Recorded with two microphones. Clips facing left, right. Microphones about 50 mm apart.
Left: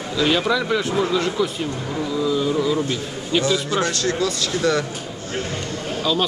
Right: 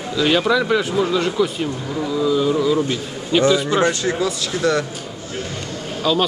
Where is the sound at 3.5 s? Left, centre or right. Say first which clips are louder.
Right 4 dB; centre.